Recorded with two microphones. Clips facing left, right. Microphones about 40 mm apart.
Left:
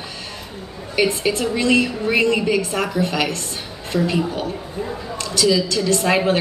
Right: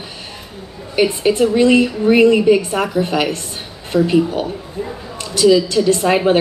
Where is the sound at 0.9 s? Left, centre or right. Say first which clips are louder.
Right 4 dB; centre.